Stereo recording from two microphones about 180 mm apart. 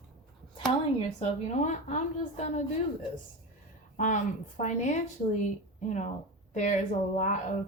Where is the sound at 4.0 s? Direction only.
45° left (ahead or behind).